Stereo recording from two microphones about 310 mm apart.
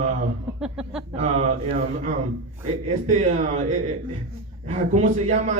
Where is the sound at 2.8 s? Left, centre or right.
Right.